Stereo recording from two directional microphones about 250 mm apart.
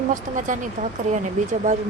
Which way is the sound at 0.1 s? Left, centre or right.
Right.